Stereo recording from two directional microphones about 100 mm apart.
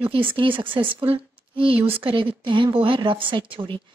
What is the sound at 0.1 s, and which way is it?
Speech, 60° right (ahead or behind).